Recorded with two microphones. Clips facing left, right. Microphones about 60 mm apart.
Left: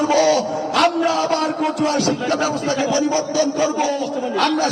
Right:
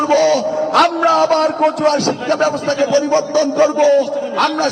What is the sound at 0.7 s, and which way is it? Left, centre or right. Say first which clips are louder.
A man's voice: right 4 dB; right.